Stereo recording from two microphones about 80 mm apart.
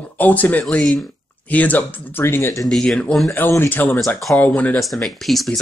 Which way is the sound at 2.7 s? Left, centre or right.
Centre.